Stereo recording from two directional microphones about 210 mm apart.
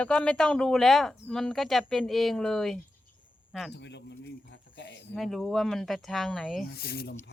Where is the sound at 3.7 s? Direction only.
55° left (ahead or behind).